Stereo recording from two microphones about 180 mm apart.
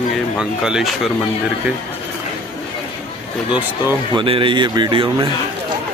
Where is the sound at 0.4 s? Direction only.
5° right (ahead or behind).